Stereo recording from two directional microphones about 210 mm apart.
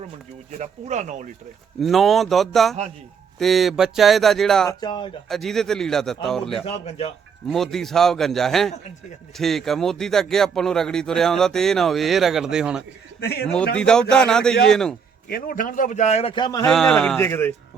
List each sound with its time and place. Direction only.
0.6 s speech: 35° right (ahead or behind)
1.8 s a man's voice: centre (ahead or behind)
4.7 s speech: 20° left (ahead or behind)
5.3 s a man's voice: centre (ahead or behind)
6.7 s speech: 30° left (ahead or behind)
7.4 s a man's voice: centre (ahead or behind)
13.1 s a man's voice: 50° left (ahead or behind)
13.7 s a man's voice: 5° left (ahead or behind)
15.3 s a man's voice: 40° left (ahead or behind); by 16.6 s 20° left (ahead or behind)
16.6 s a man's voice: centre (ahead or behind)